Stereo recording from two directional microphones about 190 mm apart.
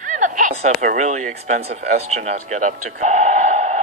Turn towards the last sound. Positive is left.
turn(degrees=-40)  # may be behind; listen again after turning